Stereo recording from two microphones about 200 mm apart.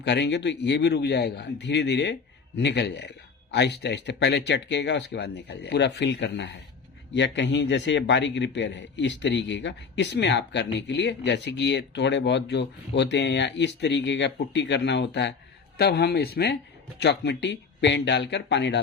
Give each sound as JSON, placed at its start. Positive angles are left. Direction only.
{"t": 0.0, "sound": "a man's voice", "side_deg": 60}